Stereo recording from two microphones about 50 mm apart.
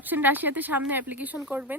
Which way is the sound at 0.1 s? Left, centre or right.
Right.